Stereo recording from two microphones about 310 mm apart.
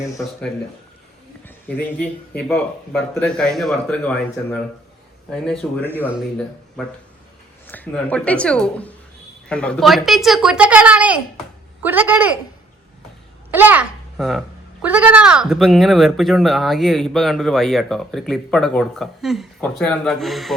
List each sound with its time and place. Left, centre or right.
1.5 s a child's voice: centre
13.5 s a child's voice: centre